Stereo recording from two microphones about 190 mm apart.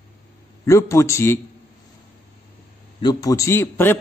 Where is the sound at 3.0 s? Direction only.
20° left (ahead or behind).